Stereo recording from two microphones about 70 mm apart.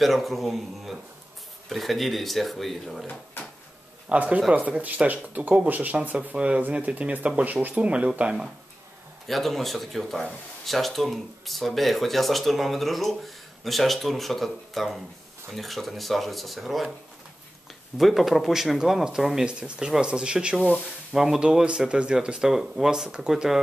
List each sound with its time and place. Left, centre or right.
0.0 s speech: centre
4.1 s speech: centre
9.3 s speech: centre
17.9 s speech: centre